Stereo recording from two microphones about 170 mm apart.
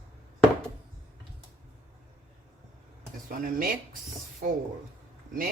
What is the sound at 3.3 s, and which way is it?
Speech, 55° right (ahead or behind).